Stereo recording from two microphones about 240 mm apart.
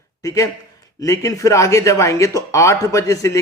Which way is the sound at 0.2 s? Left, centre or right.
Centre.